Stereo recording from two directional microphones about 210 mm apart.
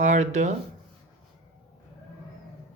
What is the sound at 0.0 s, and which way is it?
Speech, 35° right (ahead or behind).